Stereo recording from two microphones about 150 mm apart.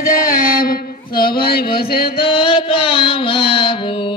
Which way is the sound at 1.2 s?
90° left.